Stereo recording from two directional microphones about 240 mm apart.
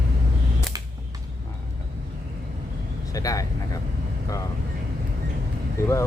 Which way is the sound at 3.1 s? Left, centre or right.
Centre.